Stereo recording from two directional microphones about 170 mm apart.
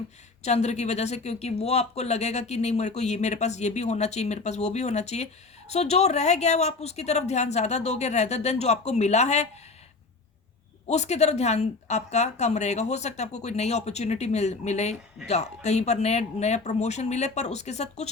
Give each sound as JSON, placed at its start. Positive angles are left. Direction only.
{"t": 0.4, "sound": "speech", "side_deg": 40}
{"t": 10.8, "sound": "speech", "side_deg": 40}